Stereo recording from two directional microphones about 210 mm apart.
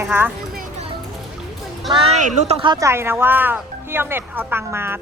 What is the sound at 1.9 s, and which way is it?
Speech, 25° right (ahead or behind).